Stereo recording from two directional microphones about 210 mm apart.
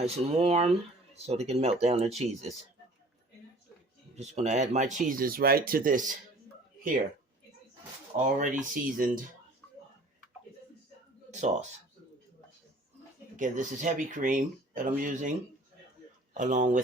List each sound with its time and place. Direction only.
0.0 s speech: 30° right (ahead or behind)
4.1 s speech: 30° right (ahead or behind)
8.4 s speech: 40° right (ahead or behind)
11.3 s speech: 35° right (ahead or behind)
13.3 s speech: 35° right (ahead or behind)
16.3 s speech: 40° right (ahead or behind)